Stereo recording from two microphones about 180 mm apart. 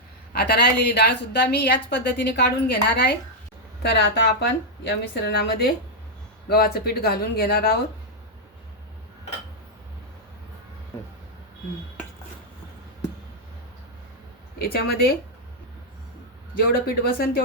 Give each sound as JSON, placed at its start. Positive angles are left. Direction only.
{"t": 0.3, "sound": "a woman's voice", "side_deg": 65}
{"t": 14.6, "sound": "speech", "side_deg": 55}
{"t": 16.6, "sound": "speech", "side_deg": 55}